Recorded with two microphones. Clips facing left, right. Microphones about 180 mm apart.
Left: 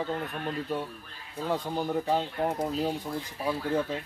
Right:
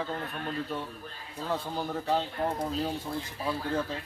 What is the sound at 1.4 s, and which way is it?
Speech, 15° left (ahead or behind).